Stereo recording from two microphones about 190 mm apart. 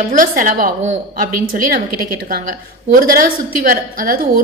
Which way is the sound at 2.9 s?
50° right (ahead or behind).